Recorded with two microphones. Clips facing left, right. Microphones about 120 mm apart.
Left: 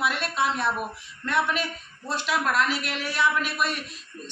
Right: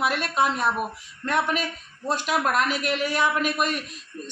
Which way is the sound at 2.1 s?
50° right (ahead or behind).